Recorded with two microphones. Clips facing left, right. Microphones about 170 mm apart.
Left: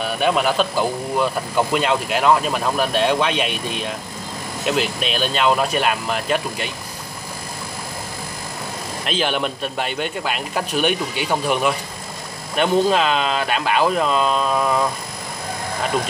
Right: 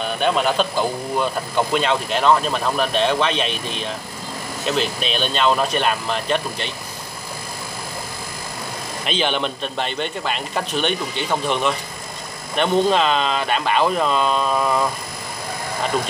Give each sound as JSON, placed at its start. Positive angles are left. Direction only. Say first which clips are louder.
{"t": 0.0, "sound": "a man's voice", "louder": "left 1 dB", "side_deg": 5}
{"t": 9.0, "sound": "a man's voice", "louder": "even", "side_deg": 5}